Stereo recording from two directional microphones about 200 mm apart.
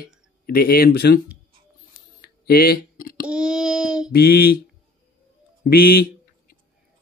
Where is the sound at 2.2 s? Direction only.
50° left (ahead or behind).